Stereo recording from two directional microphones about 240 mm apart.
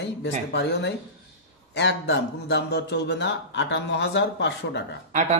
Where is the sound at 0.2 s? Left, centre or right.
Left.